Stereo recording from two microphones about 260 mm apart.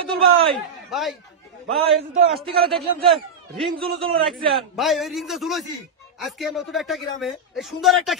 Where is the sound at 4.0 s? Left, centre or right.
Right.